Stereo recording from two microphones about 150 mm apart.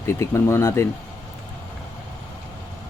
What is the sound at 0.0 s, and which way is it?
Speech, 15° left (ahead or behind).